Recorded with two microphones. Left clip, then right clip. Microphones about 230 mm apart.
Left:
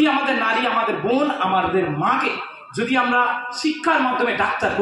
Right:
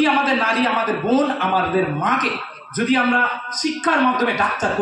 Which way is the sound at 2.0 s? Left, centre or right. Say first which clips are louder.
Even; right.